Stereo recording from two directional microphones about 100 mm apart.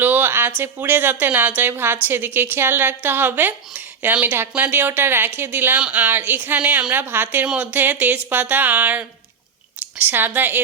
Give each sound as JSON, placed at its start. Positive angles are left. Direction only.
{"t": 0.0, "sound": "a woman's voice", "side_deg": -20}